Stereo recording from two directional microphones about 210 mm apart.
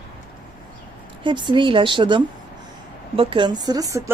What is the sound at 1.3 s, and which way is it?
Speech, 20° right (ahead or behind).